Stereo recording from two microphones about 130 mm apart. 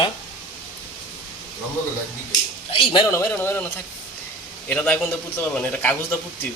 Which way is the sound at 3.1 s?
20° left (ahead or behind).